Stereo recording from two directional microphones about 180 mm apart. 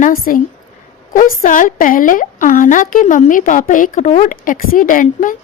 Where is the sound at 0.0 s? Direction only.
50° left (ahead or behind).